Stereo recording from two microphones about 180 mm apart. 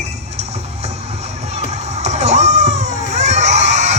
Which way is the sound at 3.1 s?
40° right (ahead or behind).